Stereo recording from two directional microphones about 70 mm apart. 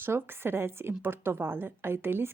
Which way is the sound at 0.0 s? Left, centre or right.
Right.